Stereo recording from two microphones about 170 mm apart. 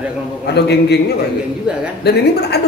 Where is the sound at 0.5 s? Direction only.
75° left (ahead or behind).